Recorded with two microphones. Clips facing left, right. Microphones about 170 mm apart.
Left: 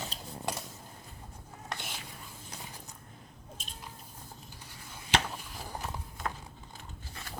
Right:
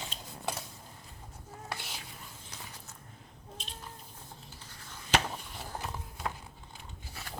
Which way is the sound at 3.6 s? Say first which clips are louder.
Right 3 dB; 45° left (ahead or behind).